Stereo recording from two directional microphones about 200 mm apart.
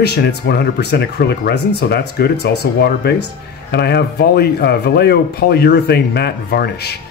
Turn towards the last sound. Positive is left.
turn(degrees=55)  # may be behind; listen again after turning